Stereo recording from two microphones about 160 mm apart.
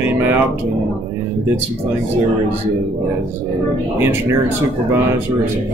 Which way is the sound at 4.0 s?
15° right (ahead or behind).